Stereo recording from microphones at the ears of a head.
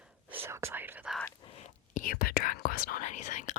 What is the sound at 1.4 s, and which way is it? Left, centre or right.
Whispering, left.